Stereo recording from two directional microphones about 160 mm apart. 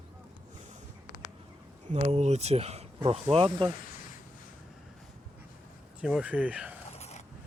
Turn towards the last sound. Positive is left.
turn(degrees=-10)  # may be behind; listen again after turning